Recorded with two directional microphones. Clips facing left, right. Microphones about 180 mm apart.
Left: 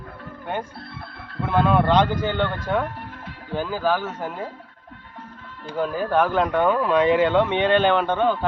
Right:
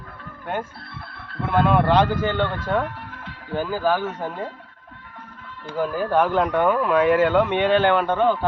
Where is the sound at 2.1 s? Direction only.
15° left (ahead or behind).